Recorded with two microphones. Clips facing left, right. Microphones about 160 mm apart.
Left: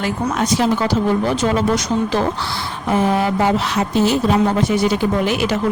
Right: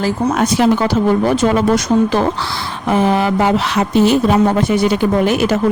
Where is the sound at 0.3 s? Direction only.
60° right (ahead or behind).